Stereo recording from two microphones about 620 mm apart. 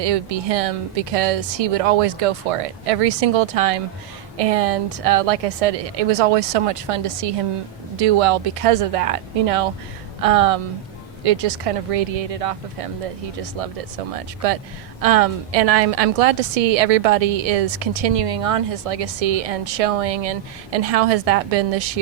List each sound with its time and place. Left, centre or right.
0.0 s a woman's voice: right